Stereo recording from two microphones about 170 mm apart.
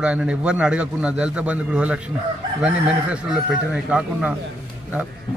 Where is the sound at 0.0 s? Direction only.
5° right (ahead or behind).